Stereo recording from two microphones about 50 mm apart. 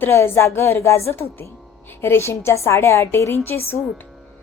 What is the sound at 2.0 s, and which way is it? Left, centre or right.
A woman's voice, left.